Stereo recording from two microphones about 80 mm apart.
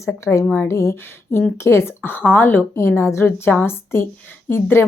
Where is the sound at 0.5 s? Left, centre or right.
Left.